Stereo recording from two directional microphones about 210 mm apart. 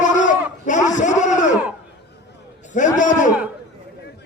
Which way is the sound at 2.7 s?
35° left (ahead or behind).